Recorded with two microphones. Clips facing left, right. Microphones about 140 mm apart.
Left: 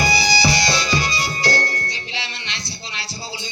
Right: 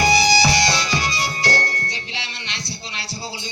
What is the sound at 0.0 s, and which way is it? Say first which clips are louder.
Music: right 3 dB; 80° right.